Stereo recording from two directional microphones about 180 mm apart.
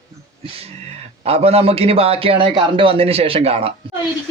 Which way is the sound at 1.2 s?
35° right (ahead or behind).